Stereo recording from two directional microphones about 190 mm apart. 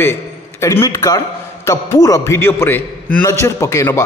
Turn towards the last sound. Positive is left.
turn(degrees=15)  # may be behind; listen again after turning